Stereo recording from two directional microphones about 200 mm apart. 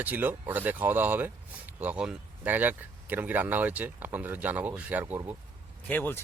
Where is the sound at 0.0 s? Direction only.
10° right (ahead or behind).